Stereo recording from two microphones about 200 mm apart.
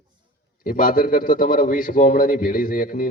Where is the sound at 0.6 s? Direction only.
45° left (ahead or behind).